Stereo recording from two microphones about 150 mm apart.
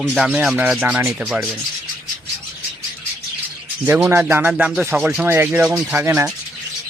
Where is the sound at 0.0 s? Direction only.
Centre (ahead or behind).